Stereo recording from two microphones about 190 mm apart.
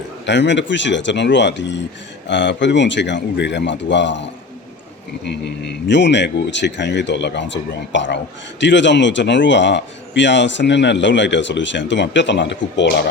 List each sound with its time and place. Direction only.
0.3 s speech: 70° left (ahead or behind)